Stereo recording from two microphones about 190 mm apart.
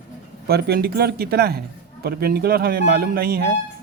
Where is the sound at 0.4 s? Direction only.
55° right (ahead or behind).